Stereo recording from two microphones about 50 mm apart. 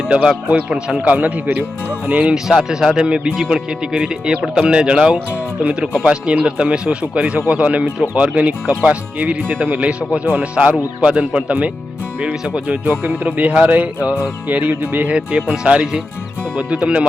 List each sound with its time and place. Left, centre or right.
0.9 s speech: right
2.3 s speech: centre
3.9 s speech: centre